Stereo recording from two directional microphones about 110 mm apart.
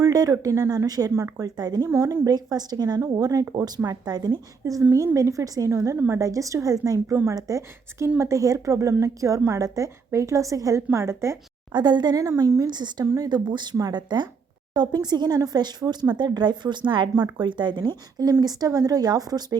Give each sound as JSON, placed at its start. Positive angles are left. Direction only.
{"t": 0.0, "sound": "a woman's voice", "side_deg": -35}
{"t": 11.7, "sound": "speech", "side_deg": -40}
{"t": 12.6, "sound": "speech", "side_deg": -40}
{"t": 18.2, "sound": "speech", "side_deg": -30}